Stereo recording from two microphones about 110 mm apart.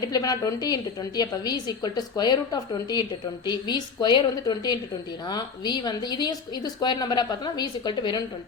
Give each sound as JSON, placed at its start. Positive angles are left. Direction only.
{"t": 0.1, "sound": "a woman's voice", "side_deg": 35}